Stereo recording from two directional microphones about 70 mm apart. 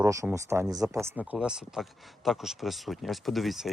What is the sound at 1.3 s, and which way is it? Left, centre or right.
Speech, centre.